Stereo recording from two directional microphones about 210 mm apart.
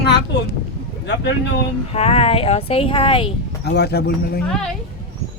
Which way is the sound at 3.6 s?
50° left (ahead or behind).